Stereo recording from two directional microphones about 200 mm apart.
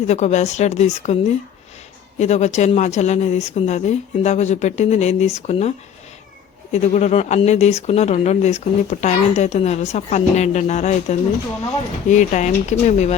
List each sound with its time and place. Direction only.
0.1 s speech: 35° left (ahead or behind)
6.7 s speech: 35° left (ahead or behind)